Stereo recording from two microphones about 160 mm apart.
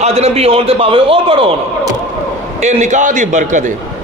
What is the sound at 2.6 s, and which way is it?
A man's voice, 50° right (ahead or behind).